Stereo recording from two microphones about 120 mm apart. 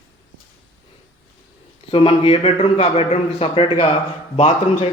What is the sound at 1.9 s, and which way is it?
A man's voice, 50° left (ahead or behind).